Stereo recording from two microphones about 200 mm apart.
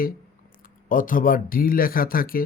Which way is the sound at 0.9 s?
40° left (ahead or behind).